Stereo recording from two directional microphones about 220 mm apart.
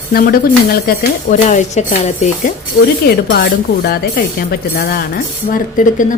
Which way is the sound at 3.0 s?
45° left (ahead or behind).